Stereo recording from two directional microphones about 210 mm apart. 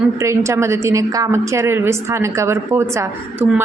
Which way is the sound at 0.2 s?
15° right (ahead or behind).